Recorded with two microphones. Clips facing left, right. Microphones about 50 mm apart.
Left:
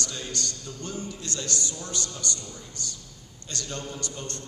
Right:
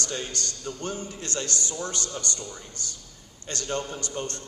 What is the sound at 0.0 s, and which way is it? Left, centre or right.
A man's voice, right.